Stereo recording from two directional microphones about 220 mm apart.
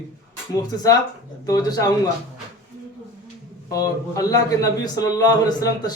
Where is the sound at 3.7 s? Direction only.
15° left (ahead or behind).